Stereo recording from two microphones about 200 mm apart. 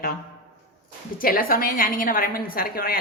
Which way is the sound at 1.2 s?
45° left (ahead or behind).